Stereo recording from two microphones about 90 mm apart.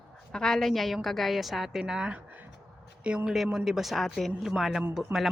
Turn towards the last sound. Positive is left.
turn(degrees=-10)  # may be behind; listen again after turning